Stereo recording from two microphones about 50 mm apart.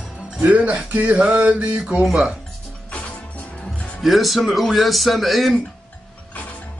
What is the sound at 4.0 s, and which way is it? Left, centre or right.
Speech, centre.